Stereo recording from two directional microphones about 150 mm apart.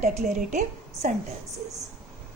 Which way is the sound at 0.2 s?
50° right (ahead or behind).